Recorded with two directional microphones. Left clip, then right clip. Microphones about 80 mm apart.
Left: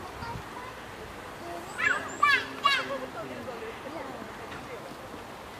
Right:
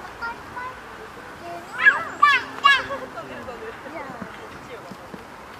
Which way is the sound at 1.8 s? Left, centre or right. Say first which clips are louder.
Right 10 dB; right.